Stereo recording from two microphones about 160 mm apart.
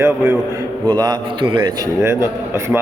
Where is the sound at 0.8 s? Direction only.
25° right (ahead or behind).